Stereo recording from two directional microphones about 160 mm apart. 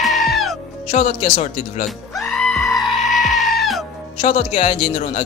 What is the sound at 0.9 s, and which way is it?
Speech, 40° left (ahead or behind).